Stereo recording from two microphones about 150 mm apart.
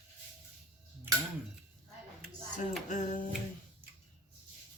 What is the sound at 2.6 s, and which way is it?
Music, 55° left (ahead or behind).